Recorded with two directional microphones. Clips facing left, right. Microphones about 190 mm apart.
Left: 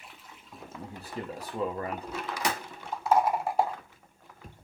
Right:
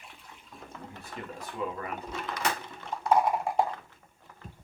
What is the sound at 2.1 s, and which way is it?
Speech, 5° left (ahead or behind).